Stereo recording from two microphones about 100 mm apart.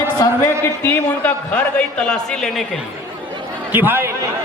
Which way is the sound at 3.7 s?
20° right (ahead or behind).